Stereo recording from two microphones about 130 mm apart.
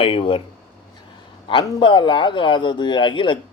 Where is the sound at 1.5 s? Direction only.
35° left (ahead or behind).